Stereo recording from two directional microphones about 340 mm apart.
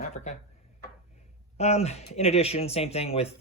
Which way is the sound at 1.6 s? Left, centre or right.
Centre.